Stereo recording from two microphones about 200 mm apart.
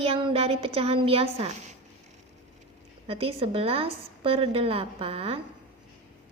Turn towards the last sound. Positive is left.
turn(degrees=-30)  # may be behind; listen again after turning